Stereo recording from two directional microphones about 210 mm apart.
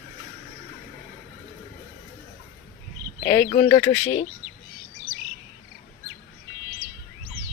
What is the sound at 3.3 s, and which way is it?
Speech, 10° left (ahead or behind).